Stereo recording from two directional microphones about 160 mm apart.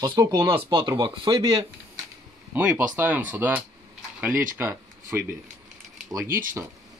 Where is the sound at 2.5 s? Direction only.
10° right (ahead or behind).